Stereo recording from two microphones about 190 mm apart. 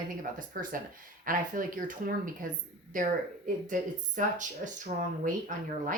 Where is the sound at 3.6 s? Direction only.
40° right (ahead or behind).